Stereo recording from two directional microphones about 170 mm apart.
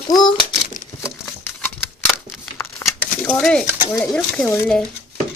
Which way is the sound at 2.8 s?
15° left (ahead or behind).